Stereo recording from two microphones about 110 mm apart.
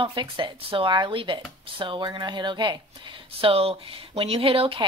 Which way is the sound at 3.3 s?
60° right (ahead or behind).